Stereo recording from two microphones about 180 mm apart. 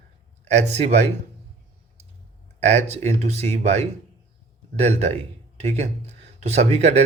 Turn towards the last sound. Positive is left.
turn(degrees=-35)  # may be behind; listen again after turning